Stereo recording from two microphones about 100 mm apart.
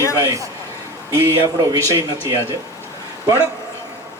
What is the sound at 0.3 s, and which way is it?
A man's voice, 35° right (ahead or behind).